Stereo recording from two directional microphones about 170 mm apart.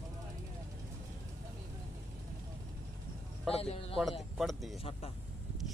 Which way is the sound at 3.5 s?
35° left (ahead or behind).